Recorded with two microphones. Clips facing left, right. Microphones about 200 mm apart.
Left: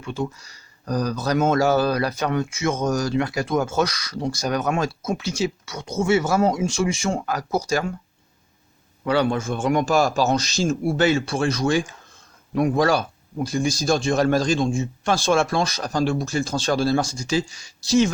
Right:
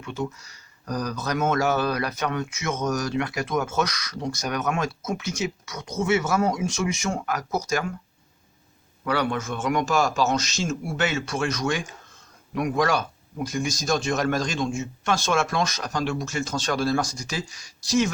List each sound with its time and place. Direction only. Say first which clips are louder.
0.0 s speech: left 3 dB; 30° left (ahead or behind)
9.0 s speech: left 5 dB; 25° left (ahead or behind)